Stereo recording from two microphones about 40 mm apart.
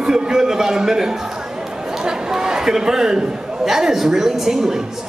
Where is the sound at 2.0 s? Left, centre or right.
Centre.